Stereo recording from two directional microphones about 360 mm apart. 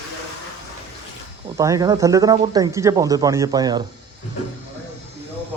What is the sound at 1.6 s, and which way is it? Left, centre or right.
Speech, centre.